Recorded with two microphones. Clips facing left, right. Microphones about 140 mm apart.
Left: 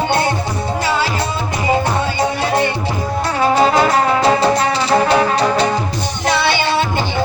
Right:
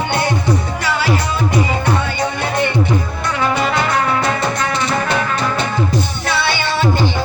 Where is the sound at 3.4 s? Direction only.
40° left (ahead or behind).